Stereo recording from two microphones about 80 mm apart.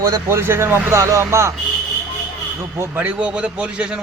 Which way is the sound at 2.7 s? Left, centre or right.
Right.